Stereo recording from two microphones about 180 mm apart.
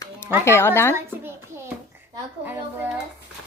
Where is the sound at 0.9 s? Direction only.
15° right (ahead or behind).